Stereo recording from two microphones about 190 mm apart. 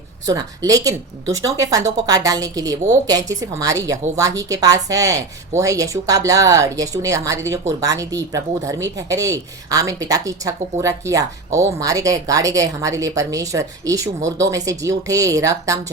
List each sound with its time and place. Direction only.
0.3 s speech: 20° right (ahead or behind)